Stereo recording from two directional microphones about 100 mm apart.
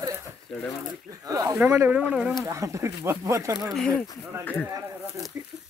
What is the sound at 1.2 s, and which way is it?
Speech, 35° right (ahead or behind).